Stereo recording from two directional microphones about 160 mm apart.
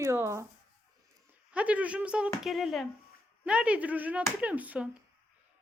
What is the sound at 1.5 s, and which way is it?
A woman's voice, 10° right (ahead or behind).